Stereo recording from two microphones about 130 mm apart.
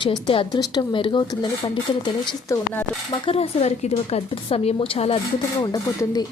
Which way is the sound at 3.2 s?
50° left (ahead or behind).